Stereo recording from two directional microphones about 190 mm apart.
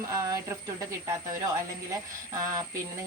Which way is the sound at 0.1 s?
15° right (ahead or behind).